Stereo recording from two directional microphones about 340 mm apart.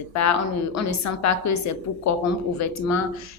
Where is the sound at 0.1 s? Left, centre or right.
Left.